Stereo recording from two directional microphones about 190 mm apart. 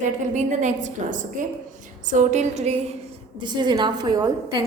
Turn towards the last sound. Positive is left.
turn(degrees=-20)  # may be behind; listen again after turning